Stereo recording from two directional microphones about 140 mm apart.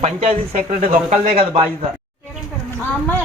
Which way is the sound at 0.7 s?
75° right (ahead or behind).